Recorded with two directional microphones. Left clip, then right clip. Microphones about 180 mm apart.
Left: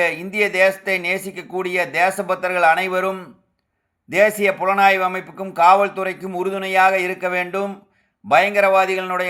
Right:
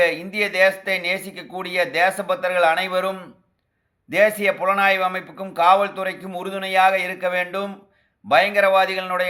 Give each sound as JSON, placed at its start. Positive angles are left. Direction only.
{"t": 0.0, "sound": "a man's voice", "side_deg": 35}